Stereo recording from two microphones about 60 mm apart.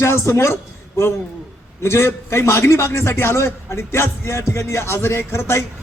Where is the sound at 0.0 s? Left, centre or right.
Left.